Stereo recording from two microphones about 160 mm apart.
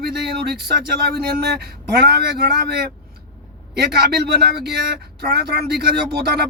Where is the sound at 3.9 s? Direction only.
90° right.